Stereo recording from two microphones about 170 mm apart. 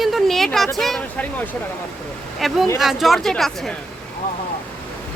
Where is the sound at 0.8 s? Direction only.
Centre (ahead or behind).